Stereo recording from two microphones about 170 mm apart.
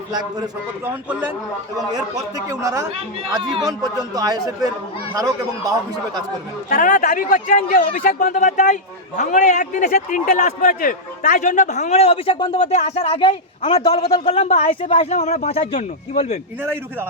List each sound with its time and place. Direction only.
0.9 s a man's voice: 10° right (ahead or behind)
4.1 s speech: 20° right (ahead or behind)
6.7 s a man's voice: 55° left (ahead or behind)
14.0 s a man's voice: 20° left (ahead or behind)
14.3 s speech: 40° left (ahead or behind)